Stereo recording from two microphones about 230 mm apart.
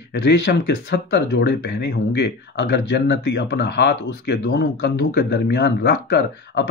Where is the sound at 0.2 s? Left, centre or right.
Left.